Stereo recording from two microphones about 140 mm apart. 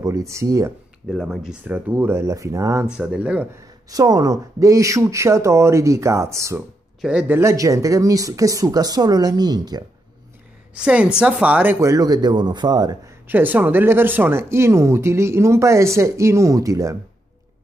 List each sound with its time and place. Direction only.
0.0 s speech: 20° right (ahead or behind)
1.1 s speech: 5° right (ahead or behind); by 2.9 s 20° right (ahead or behind)
2.9 s speech: 5° right (ahead or behind)
3.9 s speech: 25° right (ahead or behind)
7.0 s speech: 10° right (ahead or behind); by 9.8 s 30° right (ahead or behind)
10.7 s speech: 10° right (ahead or behind); by 13.1 s 30° right (ahead or behind)
13.3 s speech: 15° right (ahead or behind)